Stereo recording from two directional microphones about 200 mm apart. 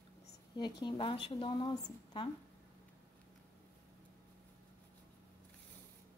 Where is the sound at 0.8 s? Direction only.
25° left (ahead or behind).